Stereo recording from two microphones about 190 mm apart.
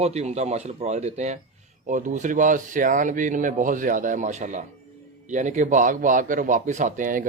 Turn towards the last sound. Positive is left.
turn(degrees=-45)  # may be behind; listen again after turning